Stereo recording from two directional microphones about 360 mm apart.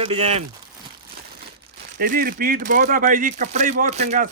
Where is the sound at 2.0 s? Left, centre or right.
Right.